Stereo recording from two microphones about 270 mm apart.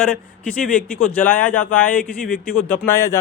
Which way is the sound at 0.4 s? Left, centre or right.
Centre.